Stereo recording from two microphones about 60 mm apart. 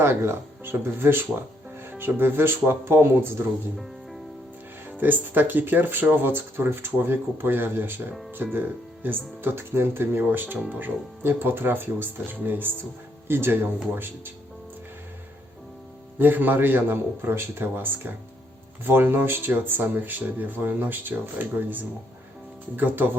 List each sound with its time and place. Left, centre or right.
0.0 s speech: right
4.9 s speech: right
16.1 s speech: right